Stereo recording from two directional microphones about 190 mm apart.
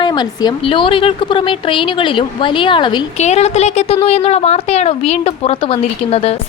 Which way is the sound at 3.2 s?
35° left (ahead or behind).